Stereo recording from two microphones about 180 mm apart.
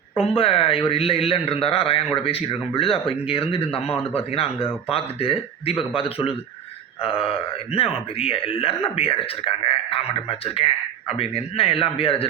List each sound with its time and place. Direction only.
0.2 s speech: 30° left (ahead or behind)